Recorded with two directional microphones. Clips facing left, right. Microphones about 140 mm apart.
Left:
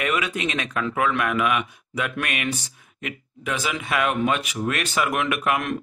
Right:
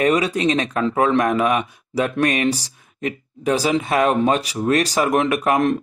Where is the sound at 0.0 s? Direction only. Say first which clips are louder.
Right 8 dB; 35° right (ahead or behind).